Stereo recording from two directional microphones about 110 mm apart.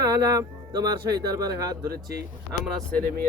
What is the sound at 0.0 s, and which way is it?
Speech, 30° right (ahead or behind).